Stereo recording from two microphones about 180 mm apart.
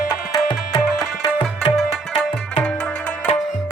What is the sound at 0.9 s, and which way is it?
Tabla, 25° left (ahead or behind).